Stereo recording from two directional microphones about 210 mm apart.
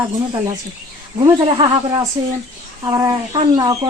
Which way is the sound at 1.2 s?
25° right (ahead or behind).